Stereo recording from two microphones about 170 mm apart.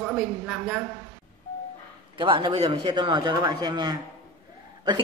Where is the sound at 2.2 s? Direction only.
30° right (ahead or behind).